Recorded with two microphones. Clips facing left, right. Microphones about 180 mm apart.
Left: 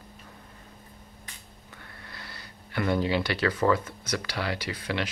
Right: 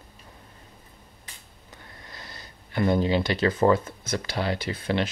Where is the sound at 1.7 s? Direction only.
20° right (ahead or behind).